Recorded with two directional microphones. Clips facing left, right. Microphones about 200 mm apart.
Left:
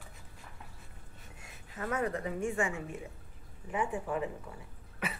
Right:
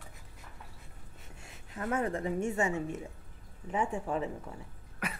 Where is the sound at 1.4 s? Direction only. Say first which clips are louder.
Right 2 dB; 30° right (ahead or behind).